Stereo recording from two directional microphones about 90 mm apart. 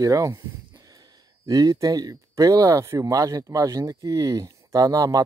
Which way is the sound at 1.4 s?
40° right (ahead or behind).